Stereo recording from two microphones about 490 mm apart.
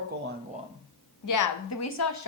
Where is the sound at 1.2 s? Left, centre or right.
Left.